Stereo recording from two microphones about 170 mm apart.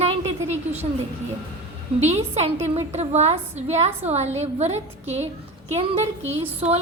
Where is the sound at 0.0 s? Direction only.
35° right (ahead or behind).